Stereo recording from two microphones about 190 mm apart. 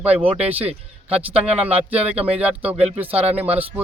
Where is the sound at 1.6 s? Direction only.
10° right (ahead or behind).